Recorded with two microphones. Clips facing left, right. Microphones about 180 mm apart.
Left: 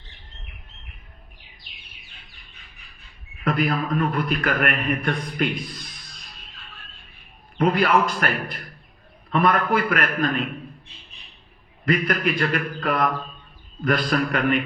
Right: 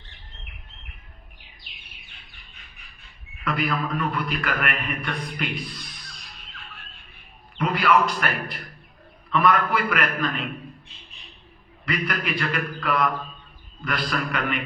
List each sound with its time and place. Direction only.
3.4 s a man's voice: 45° left (ahead or behind)
7.6 s a man's voice: 45° left (ahead or behind)
11.9 s a man's voice: 50° left (ahead or behind)